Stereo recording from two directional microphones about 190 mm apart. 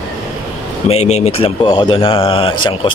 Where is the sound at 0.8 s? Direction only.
35° left (ahead or behind).